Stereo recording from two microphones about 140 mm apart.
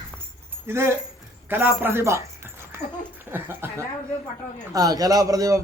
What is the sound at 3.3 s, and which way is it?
Speech, 15° right (ahead or behind).